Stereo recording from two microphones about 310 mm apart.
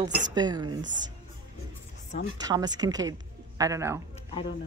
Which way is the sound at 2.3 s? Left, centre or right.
Centre.